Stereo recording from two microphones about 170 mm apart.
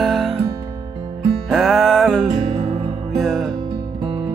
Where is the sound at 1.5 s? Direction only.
Centre (ahead or behind).